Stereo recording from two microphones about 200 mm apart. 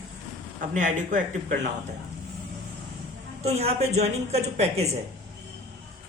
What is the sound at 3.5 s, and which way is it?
A woman's voice, 30° right (ahead or behind).